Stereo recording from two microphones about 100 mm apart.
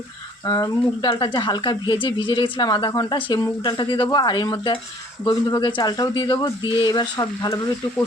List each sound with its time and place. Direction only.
0.4 s speech: 40° left (ahead or behind)
5.5 s speech: 50° left (ahead or behind)